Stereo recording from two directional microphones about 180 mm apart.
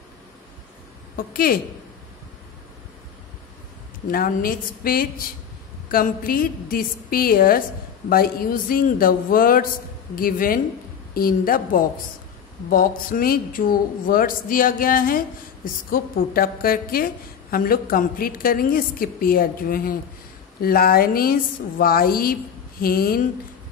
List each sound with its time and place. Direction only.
1.1 s speech: 55° left (ahead or behind)
4.1 s a woman's voice: 55° left (ahead or behind)